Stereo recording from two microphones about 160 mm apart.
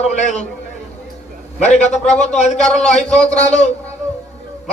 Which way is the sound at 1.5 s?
45° left (ahead or behind).